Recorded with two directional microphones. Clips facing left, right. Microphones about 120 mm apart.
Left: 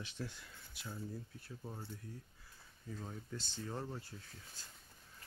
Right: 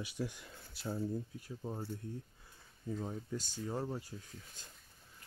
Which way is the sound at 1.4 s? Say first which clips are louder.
Right 6 dB; 25° right (ahead or behind).